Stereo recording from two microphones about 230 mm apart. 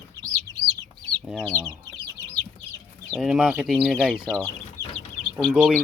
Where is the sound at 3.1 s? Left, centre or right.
Centre.